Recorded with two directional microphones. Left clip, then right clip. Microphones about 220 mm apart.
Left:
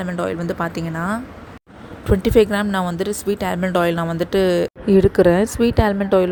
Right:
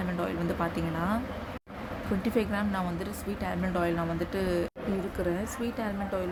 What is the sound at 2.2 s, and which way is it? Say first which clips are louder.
Speech: left 15 dB; 30° left (ahead or behind).